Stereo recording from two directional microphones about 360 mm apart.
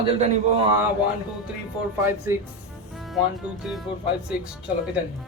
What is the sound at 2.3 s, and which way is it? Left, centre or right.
Speech, centre.